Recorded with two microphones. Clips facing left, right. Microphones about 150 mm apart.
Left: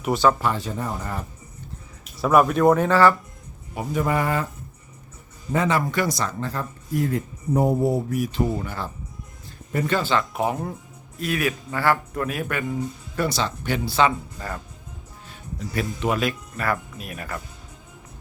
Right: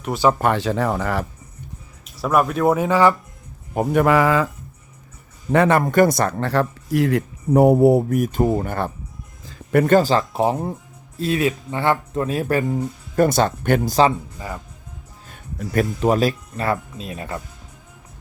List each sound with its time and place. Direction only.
0.3 s speech: 65° right (ahead or behind); by 1.3 s 90° right
2.1 s speech: centre (ahead or behind); by 3.2 s 15° right (ahead or behind)
3.9 s speech: 90° right
5.5 s speech: 60° right (ahead or behind); by 12.6 s 30° right (ahead or behind)
12.7 s speech: 50° right (ahead or behind)
14.3 s speech: 10° right (ahead or behind)
15.3 s speech: 50° right (ahead or behind)
16.6 s speech: 25° right (ahead or behind)